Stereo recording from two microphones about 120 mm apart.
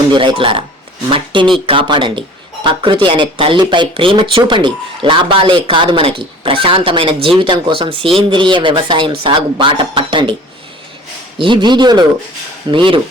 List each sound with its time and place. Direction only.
0.1 s speech: 45° right (ahead or behind)
11.3 s a man's voice: 40° right (ahead or behind)